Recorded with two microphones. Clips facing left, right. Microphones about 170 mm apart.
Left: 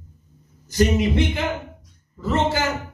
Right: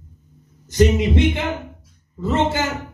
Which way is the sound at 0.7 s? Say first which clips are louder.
Right 3 dB; 20° right (ahead or behind).